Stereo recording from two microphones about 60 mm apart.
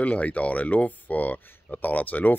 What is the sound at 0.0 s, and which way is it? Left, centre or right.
Speech, left.